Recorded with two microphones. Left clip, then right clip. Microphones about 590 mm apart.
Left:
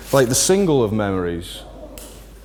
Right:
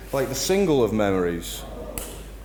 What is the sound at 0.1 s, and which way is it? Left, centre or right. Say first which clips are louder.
Speech: left 8 dB; left.